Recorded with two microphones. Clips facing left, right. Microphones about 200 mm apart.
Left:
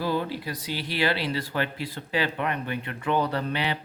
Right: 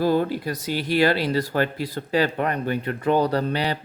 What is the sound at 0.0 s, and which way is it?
Speech, 45° right (ahead or behind).